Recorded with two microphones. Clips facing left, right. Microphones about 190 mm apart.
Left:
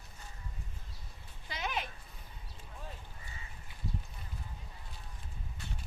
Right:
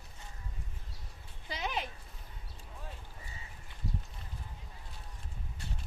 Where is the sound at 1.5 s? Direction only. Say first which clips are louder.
Right 1 dB; 30° right (ahead or behind).